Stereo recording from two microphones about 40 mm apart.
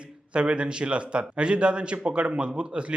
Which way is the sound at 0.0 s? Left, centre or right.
Right.